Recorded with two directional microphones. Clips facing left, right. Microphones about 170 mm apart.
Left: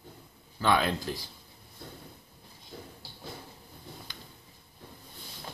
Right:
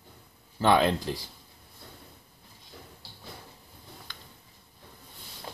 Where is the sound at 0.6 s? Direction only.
25° right (ahead or behind).